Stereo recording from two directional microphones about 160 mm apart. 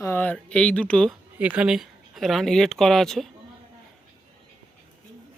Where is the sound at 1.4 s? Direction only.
10° right (ahead or behind).